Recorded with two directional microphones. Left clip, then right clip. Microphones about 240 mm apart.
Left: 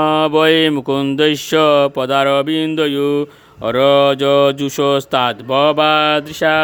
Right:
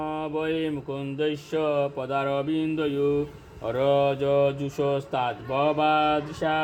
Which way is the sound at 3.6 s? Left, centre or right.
Left.